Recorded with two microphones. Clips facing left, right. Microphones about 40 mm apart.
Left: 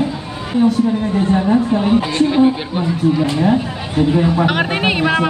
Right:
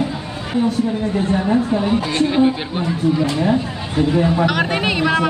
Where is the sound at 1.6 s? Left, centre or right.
Centre.